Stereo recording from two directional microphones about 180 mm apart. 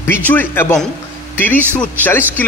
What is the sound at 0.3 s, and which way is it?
A man's voice, 10° left (ahead or behind).